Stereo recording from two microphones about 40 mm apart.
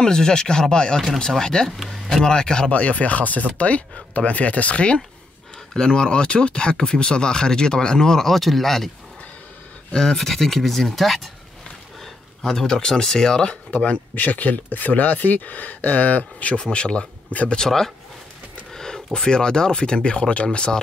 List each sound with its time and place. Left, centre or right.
0.0 s speech: centre
2.7 s speech: left; by 8.9 s centre
9.9 s speech: centre
12.4 s speech: centre
13.7 s speech: left
14.1 s speech: left
16.7 s speech: left
17.3 s speech: left
17.6 s speech: centre
18.8 s a sound: centre
19.1 s speech: centre